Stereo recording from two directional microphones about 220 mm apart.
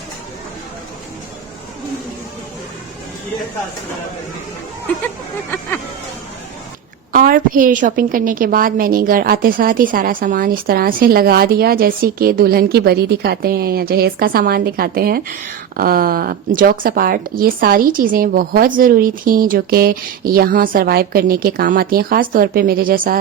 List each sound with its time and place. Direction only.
5.0 s speech: 10° left (ahead or behind)
7.1 s a woman's voice: 40° right (ahead or behind)